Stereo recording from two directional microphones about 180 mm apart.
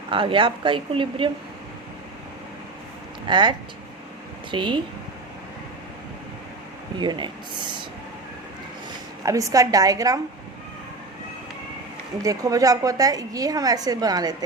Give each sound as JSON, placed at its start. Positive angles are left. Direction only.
{"t": 0.1, "sound": "a woman's voice", "side_deg": -30}
{"t": 3.2, "sound": "a woman's voice", "side_deg": -25}
{"t": 4.5, "sound": "a woman's voice", "side_deg": -25}
{"t": 7.0, "sound": "a woman's voice", "side_deg": -25}
{"t": 9.2, "sound": "a woman's voice", "side_deg": -20}
{"t": 12.2, "sound": "a woman's voice", "side_deg": -20}